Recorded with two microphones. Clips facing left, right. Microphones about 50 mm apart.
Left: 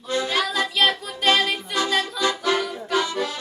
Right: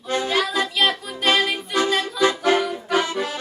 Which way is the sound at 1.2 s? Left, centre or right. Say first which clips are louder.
Even; centre.